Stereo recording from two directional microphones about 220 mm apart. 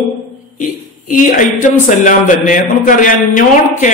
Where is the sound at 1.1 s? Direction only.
35° left (ahead or behind).